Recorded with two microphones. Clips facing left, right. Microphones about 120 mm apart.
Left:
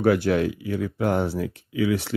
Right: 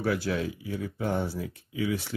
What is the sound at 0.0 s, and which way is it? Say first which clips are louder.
Speech: left 8 dB; 65° left (ahead or behind).